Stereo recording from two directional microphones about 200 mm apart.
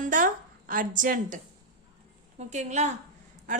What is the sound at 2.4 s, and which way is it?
Speech, 35° right (ahead or behind).